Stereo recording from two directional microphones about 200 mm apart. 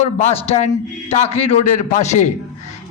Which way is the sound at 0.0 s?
30° left (ahead or behind).